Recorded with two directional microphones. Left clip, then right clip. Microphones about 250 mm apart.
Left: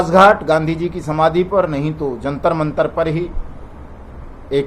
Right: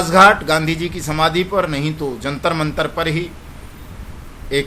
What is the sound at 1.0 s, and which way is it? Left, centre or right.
Speech, right.